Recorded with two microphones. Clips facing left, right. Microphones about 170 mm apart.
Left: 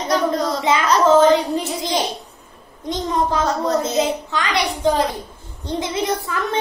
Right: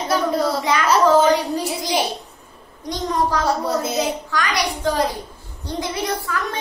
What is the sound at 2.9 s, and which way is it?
Speech, 20° left (ahead or behind).